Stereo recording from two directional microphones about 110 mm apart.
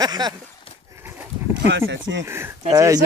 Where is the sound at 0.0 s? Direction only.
35° right (ahead or behind).